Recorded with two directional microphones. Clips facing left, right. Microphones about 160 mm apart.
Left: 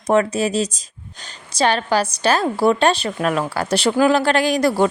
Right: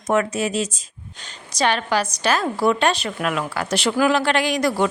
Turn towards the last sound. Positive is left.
turn(degrees=35)  # may be behind; listen again after turning